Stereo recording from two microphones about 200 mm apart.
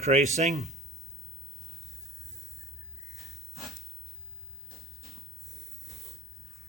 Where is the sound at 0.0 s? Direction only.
35° right (ahead or behind).